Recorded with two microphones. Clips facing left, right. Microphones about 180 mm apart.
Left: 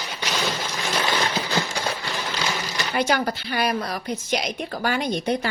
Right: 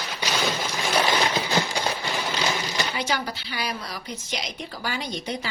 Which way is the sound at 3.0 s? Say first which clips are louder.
Left 6 dB; 55° left (ahead or behind).